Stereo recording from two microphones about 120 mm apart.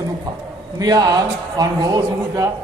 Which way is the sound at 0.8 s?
35° right (ahead or behind).